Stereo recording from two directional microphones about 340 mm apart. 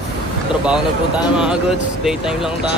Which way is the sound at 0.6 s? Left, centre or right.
Centre.